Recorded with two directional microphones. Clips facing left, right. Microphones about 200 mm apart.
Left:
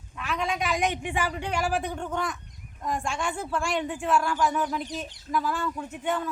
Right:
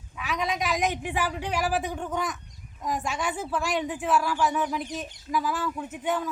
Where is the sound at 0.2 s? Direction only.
5° right (ahead or behind).